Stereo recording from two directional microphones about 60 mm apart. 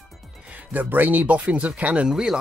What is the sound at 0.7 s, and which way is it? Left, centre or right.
Speech, right.